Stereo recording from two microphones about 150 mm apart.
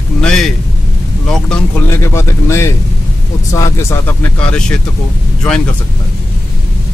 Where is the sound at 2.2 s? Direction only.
20° left (ahead or behind).